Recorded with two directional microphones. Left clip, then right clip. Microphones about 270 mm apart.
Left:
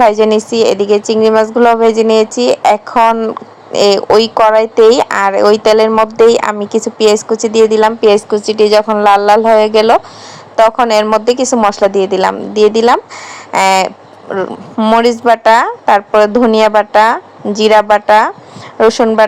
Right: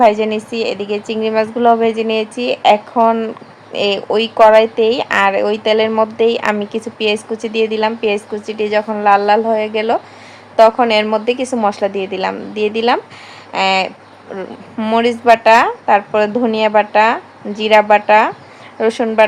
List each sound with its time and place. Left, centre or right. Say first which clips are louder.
0.0 s speech: left 4 dB; left